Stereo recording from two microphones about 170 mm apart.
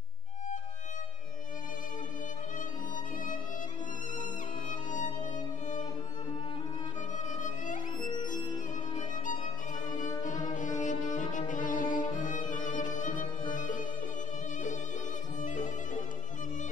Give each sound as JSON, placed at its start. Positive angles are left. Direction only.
{"t": 4.2, "sound": "music", "side_deg": 50}
{"t": 7.3, "sound": "music", "side_deg": 50}
{"t": 9.1, "sound": "violin", "side_deg": 50}
{"t": 9.8, "sound": "music", "side_deg": 50}
{"t": 15.4, "sound": "music", "side_deg": 50}